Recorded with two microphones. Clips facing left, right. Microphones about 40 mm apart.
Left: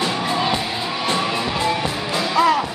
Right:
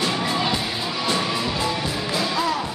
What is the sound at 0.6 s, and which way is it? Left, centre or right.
Music, centre.